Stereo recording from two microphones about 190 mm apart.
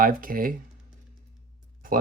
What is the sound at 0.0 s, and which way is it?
Speech, 50° right (ahead or behind).